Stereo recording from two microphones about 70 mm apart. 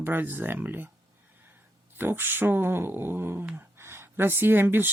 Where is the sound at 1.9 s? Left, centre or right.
Right.